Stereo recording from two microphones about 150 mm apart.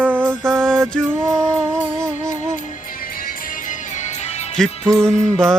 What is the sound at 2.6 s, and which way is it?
Music, 75° left (ahead or behind).